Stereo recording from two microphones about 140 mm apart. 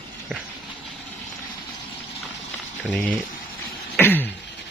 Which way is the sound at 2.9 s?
10° left (ahead or behind).